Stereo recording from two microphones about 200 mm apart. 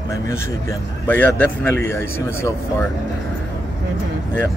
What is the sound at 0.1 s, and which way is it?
A man's voice, 15° left (ahead or behind).